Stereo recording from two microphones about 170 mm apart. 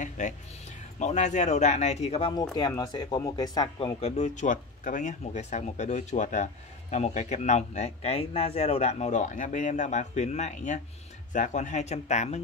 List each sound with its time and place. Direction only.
0.2 s speech: 45° left (ahead or behind)
2.5 s speech: 25° left (ahead or behind)
4.2 s speech: 50° left (ahead or behind)